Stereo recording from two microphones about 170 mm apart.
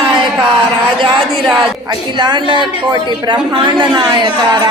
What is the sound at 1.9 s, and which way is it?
A woman's voice, 25° right (ahead or behind).